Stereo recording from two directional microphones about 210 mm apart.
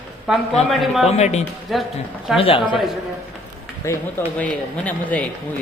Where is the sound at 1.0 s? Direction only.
30° left (ahead or behind).